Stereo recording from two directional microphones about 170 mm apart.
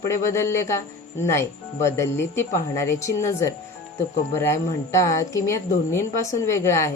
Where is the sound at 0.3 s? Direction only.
15° left (ahead or behind).